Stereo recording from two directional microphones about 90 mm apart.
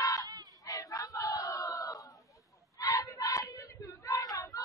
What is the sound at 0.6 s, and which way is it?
Battle cry, 40° left (ahead or behind).